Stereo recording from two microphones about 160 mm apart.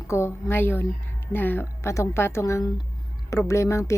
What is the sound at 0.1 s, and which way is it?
A woman's voice, 15° left (ahead or behind).